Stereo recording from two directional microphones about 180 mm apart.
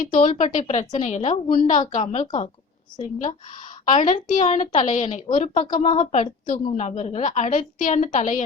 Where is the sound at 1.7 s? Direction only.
45° left (ahead or behind).